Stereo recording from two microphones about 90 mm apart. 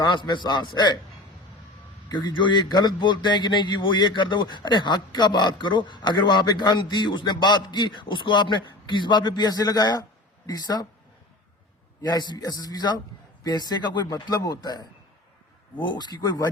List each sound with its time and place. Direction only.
0.0 s a man's voice: 60° left (ahead or behind)
2.0 s a man's voice: 60° left (ahead or behind)
12.0 s a man's voice: 50° left (ahead or behind)